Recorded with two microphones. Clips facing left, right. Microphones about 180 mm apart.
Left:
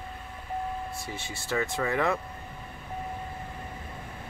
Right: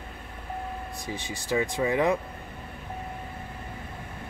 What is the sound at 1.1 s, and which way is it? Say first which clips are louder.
Speech: right 6 dB; 15° right (ahead or behind).